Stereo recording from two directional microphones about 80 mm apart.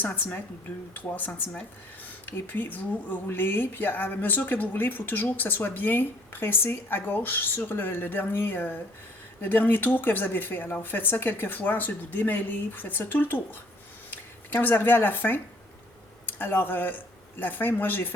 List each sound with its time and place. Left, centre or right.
0.0 s speech: centre